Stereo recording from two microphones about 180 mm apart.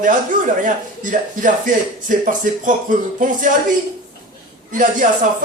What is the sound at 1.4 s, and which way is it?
Speech, 45° right (ahead or behind).